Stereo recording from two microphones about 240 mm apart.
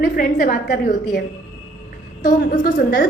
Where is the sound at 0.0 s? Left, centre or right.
Left.